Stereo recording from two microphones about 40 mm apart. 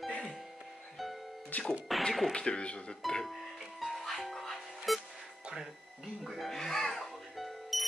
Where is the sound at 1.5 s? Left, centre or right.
Left.